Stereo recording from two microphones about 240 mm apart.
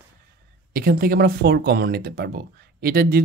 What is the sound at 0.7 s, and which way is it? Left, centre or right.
Speech, right.